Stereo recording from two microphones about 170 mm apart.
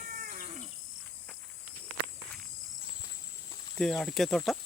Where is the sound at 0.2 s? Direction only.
55° right (ahead or behind).